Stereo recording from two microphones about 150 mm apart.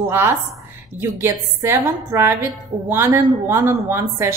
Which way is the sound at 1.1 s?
15° right (ahead or behind).